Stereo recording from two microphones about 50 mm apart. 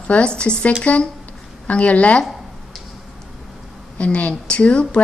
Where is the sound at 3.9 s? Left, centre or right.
Left.